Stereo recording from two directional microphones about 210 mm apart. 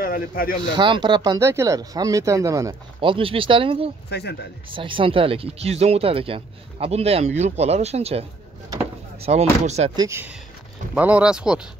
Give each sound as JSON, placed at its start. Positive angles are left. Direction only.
{"t": 0.0, "sound": "speech", "side_deg": 45}
{"t": 0.7, "sound": "speech", "side_deg": -20}
{"t": 4.1, "sound": "speech", "side_deg": 50}
{"t": 4.7, "sound": "speech", "side_deg": -25}
{"t": 9.9, "sound": "speech", "side_deg": -15}